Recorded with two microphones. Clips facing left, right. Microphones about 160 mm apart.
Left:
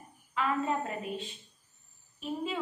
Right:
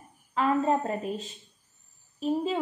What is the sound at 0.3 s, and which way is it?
A woman's voice, 40° right (ahead or behind).